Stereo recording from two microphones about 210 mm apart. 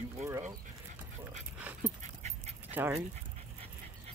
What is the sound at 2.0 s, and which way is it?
Dog, 30° right (ahead or behind).